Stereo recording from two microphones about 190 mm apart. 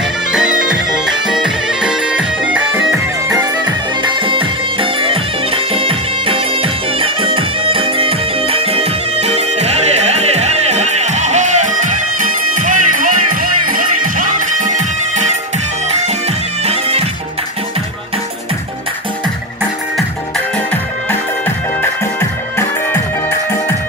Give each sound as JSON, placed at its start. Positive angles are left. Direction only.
{"t": 0.3, "sound": "bagpipes", "side_deg": -5}
{"t": 3.3, "sound": "music", "side_deg": -25}
{"t": 20.5, "sound": "music", "side_deg": 10}